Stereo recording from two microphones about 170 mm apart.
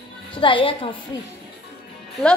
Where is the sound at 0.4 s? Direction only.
30° left (ahead or behind).